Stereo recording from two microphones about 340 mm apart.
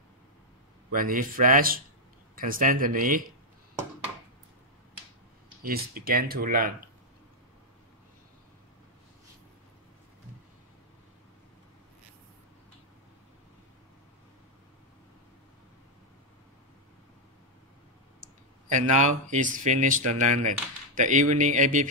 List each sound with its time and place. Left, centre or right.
0.9 s speech: right
5.6 s speech: right
18.7 s speech: right